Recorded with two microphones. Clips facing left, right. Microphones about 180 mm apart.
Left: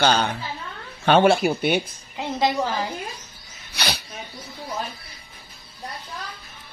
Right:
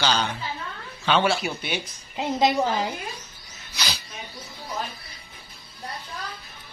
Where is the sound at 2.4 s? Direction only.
20° right (ahead or behind).